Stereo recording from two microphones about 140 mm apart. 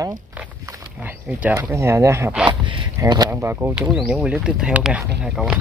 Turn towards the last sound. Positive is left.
turn(degrees=-5)  # may be behind; listen again after turning